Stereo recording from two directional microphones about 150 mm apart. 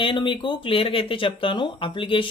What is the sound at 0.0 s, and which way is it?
Speech, 35° left (ahead or behind).